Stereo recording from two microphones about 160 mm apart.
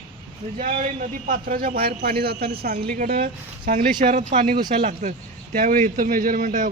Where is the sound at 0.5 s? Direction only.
60° right (ahead or behind).